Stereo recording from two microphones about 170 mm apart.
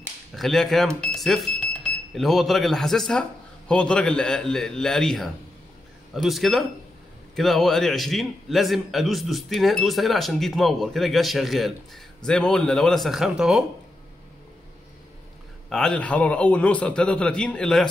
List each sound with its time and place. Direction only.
0.4 s a man's voice: centre (ahead or behind)
15.7 s a man's voice: 5° left (ahead or behind)